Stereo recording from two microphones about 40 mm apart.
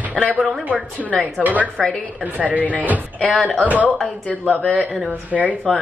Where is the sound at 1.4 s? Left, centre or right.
Right.